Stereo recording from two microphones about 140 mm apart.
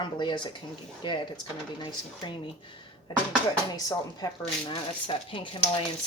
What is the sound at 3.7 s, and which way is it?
Speech, 25° left (ahead or behind).